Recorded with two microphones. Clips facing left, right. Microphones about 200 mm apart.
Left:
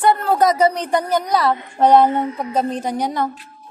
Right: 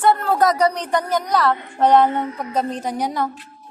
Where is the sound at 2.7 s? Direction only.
Centre (ahead or behind).